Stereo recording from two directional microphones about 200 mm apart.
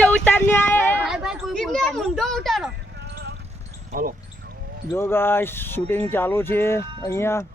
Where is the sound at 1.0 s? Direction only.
5° right (ahead or behind).